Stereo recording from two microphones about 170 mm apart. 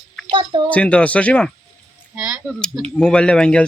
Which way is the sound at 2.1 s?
5° right (ahead or behind).